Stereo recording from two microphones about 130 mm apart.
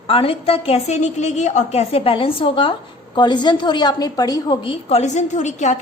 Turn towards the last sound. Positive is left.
turn(degrees=65)  # may be behind; listen again after turning